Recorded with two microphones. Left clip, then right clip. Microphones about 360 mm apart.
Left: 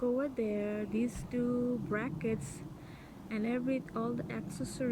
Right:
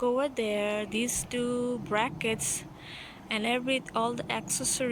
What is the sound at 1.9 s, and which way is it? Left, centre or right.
Speech, centre.